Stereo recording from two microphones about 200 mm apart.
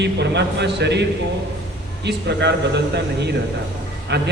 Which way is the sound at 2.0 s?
60° right (ahead or behind).